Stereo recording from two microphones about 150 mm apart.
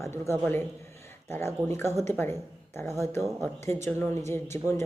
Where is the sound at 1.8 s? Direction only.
15° left (ahead or behind).